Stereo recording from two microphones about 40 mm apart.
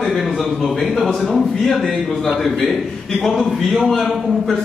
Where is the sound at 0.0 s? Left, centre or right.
Centre.